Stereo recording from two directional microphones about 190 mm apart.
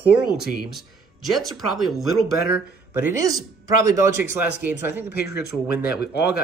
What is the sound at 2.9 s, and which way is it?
A man's voice, 15° right (ahead or behind).